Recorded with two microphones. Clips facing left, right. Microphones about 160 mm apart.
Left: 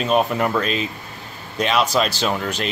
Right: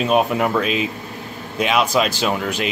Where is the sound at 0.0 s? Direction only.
5° right (ahead or behind).